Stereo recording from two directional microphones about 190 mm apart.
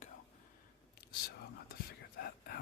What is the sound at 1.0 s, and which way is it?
Whispering, 55° left (ahead or behind).